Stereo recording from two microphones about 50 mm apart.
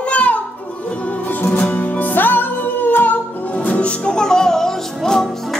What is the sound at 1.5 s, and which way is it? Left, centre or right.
Music, left.